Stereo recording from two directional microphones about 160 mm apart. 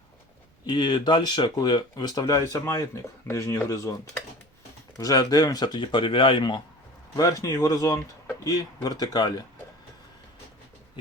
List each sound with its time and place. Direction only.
0.6 s speech: 30° left (ahead or behind)
4.9 s speech: 20° left (ahead or behind)